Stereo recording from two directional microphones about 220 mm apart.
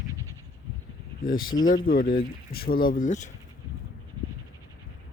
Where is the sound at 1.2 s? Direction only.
40° left (ahead or behind).